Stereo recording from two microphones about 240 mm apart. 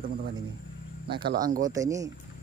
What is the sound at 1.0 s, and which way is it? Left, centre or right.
Speech, right.